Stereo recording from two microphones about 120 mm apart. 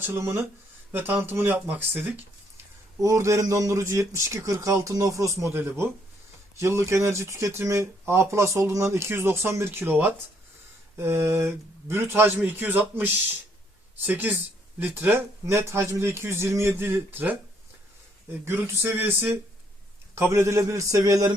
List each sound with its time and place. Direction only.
0.0 s speech: 20° right (ahead or behind)
14.1 s speech: 15° right (ahead or behind)
18.4 s speech: 20° right (ahead or behind)